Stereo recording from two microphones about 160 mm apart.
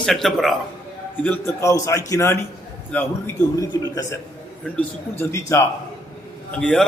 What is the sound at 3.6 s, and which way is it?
Speech, 20° left (ahead or behind).